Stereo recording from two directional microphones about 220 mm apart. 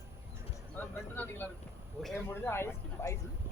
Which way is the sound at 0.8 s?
10° left (ahead or behind).